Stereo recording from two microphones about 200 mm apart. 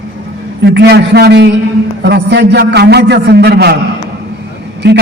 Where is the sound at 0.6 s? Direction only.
55° right (ahead or behind).